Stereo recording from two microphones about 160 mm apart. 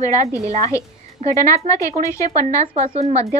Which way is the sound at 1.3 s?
20° left (ahead or behind).